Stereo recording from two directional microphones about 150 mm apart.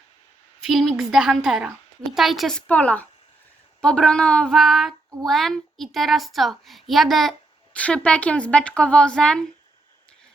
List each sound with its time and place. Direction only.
0.6 s a woman's voice: centre (ahead or behind)